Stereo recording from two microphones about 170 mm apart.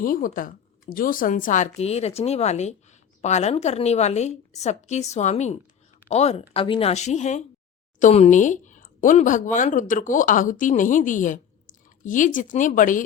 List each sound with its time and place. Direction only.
0.0 s speech: 55° left (ahead or behind)
1.8 s a woman's voice: 40° left (ahead or behind)